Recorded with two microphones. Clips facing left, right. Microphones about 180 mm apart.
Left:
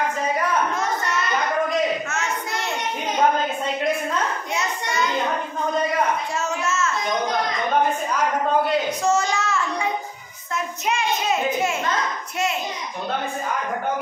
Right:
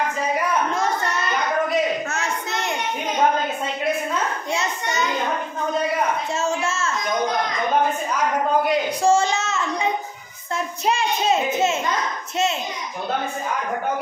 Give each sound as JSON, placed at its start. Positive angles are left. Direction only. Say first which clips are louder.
{"t": 6.3, "sound": "a child's voice", "louder": "right 1 dB", "side_deg": -30}
{"t": 9.0, "sound": "a child's voice", "louder": "right 3 dB", "side_deg": -30}